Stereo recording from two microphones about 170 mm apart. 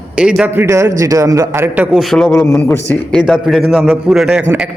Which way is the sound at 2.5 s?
15° left (ahead or behind).